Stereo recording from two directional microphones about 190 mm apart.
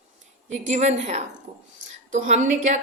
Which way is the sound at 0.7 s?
35° right (ahead or behind).